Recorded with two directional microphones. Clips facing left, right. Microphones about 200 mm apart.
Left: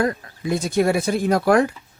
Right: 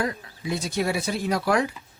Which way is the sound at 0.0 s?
50° left (ahead or behind).